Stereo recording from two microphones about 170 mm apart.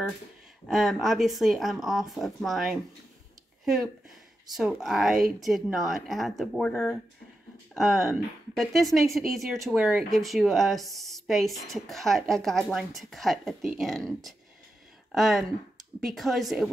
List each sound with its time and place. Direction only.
0.7 s speech: centre (ahead or behind)